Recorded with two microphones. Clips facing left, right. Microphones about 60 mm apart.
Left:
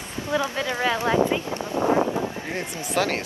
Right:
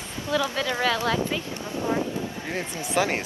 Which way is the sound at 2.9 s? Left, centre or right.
Centre.